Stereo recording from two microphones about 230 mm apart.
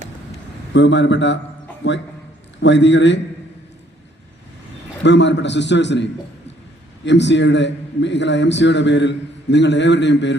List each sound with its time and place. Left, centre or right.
0.7 s a man's voice: left
2.6 s a man's voice: left
5.0 s a man's voice: left